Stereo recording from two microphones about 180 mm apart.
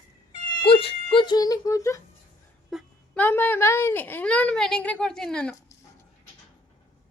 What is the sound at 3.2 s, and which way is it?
A woman's voice, 10° left (ahead or behind).